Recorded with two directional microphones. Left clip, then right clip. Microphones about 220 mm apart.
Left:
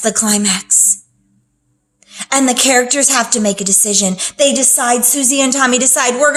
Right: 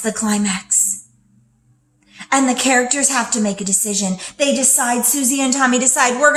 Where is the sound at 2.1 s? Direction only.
45° left (ahead or behind).